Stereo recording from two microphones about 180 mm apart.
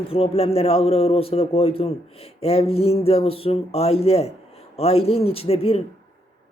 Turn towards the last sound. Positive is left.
turn(degrees=35)  # may be behind; listen again after turning